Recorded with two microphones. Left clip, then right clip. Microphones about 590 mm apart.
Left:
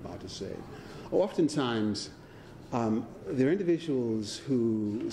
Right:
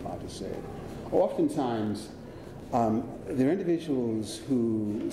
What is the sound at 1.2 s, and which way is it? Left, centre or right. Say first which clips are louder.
Speech: right 2 dB; left.